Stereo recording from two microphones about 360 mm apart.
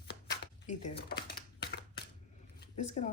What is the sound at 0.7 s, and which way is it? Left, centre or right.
Typewriter, centre.